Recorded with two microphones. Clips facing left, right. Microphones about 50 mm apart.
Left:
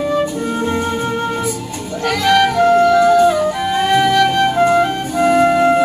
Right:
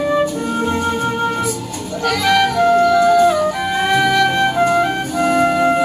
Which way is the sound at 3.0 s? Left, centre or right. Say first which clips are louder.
Left 1 dB; centre.